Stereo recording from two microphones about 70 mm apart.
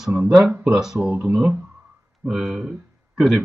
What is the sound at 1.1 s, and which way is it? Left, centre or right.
Speech, right.